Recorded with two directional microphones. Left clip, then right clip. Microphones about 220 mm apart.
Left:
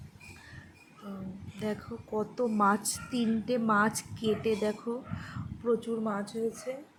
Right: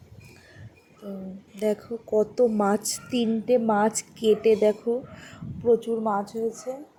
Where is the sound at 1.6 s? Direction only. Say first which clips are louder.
Right 10 dB; 20° right (ahead or behind).